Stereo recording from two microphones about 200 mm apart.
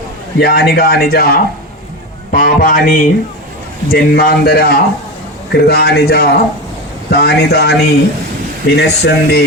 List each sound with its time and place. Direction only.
0.3 s speech: 50° left (ahead or behind)